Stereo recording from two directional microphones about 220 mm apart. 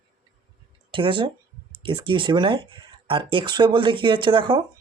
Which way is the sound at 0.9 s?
20° right (ahead or behind).